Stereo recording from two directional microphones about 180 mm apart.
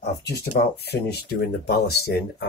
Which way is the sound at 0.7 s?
60° left (ahead or behind).